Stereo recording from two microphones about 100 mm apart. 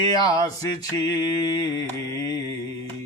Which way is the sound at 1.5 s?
40° left (ahead or behind).